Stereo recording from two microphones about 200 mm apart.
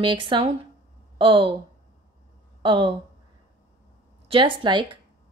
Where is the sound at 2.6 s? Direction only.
25° right (ahead or behind).